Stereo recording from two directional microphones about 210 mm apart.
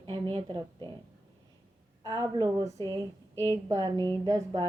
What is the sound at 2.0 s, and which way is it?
Speech, 20° right (ahead or behind).